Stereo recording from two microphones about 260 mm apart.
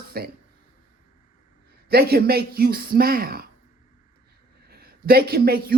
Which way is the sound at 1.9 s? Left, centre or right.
Right.